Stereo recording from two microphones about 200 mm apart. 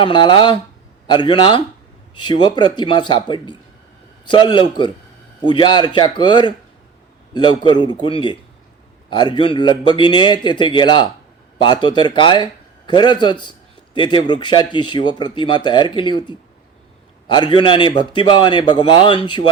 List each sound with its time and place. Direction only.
0.0 s speech: 25° left (ahead or behind)